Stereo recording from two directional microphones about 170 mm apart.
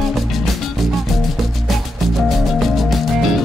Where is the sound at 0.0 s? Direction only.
Centre (ahead or behind).